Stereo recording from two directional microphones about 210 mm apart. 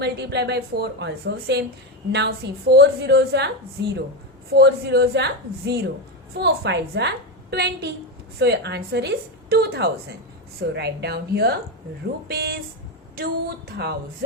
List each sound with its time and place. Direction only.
0.0 s a woman's voice: 50° right (ahead or behind)
13.7 s a woman's voice: 50° right (ahead or behind)